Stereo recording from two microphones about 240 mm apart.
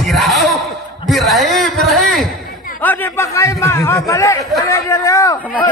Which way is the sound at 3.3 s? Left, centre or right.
Centre.